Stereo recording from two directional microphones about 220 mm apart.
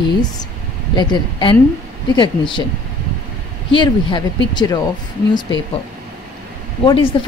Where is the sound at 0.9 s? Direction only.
20° left (ahead or behind).